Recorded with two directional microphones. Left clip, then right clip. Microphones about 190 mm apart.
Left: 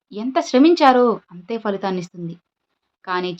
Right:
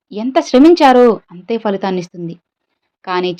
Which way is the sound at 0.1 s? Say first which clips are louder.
Right 6 dB; 25° right (ahead or behind).